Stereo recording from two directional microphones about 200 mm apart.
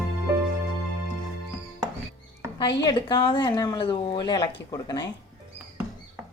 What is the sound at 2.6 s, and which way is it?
Speech, 20° left (ahead or behind).